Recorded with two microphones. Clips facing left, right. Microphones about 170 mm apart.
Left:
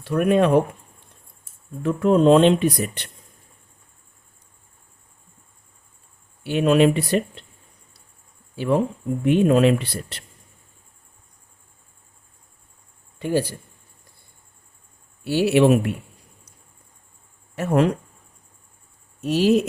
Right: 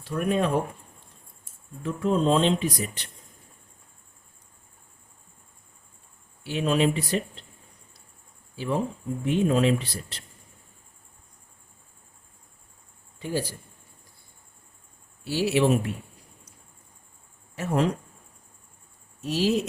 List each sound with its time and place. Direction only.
0.0 s speech: 70° left (ahead or behind)
1.8 s speech: 70° left (ahead or behind)
6.4 s speech: 60° left (ahead or behind)
8.5 s speech: 65° left (ahead or behind)
13.1 s speech: 65° left (ahead or behind)
15.2 s speech: 60° left (ahead or behind)
17.5 s speech: 60° left (ahead or behind)
19.2 s speech: 60° left (ahead or behind)